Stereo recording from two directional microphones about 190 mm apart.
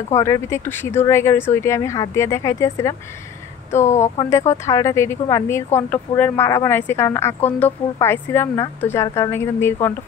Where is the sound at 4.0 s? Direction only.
15° left (ahead or behind).